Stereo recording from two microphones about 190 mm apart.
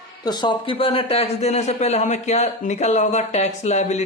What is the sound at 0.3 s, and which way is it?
A man's voice, 25° left (ahead or behind).